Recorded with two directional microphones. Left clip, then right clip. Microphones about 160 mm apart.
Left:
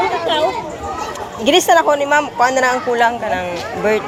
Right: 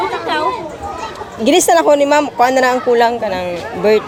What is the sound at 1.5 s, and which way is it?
Speech, 65° right (ahead or behind).